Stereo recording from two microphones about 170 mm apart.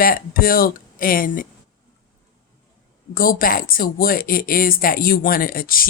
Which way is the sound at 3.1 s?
55° left (ahead or behind).